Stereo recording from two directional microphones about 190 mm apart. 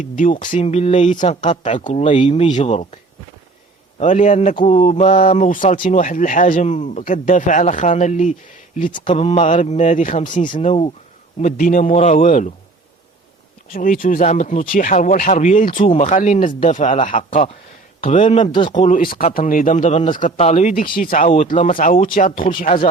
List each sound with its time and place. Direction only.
0.0 s speech: 45° left (ahead or behind)
0.5 s a man's voice: 35° left (ahead or behind)
2.2 s speech: 25° left (ahead or behind)
2.5 s a man's voice: 40° left (ahead or behind)
4.0 s a man's voice: 40° left (ahead or behind)
9.0 s a man's voice: 30° left (ahead or behind)
11.4 s speech: 45° left (ahead or behind)
13.7 s a man's voice: 45° left (ahead or behind)
18.5 s speech: 25° left (ahead or behind)
18.8 s a man's voice: 45° left (ahead or behind)